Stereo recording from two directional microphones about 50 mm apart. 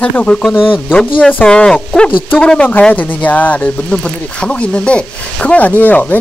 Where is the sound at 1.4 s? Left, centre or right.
Centre.